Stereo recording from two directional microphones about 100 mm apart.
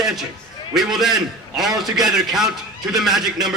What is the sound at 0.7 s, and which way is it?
A man's voice, 5° right (ahead or behind).